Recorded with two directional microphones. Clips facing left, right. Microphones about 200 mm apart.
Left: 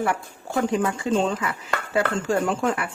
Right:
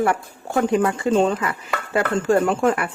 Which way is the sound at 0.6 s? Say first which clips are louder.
Right 4 dB; 55° right (ahead or behind).